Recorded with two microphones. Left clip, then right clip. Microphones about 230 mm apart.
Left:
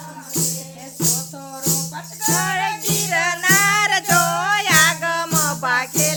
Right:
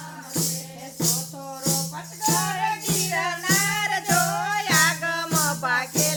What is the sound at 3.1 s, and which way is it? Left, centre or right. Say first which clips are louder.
Music: left 8 dB; left.